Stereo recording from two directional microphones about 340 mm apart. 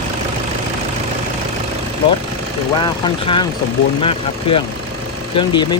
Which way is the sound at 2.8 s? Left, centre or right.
Centre.